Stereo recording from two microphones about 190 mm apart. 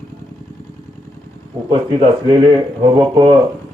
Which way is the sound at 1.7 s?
25° right (ahead or behind).